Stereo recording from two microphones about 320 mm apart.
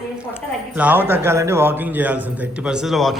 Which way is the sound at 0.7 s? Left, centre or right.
Centre.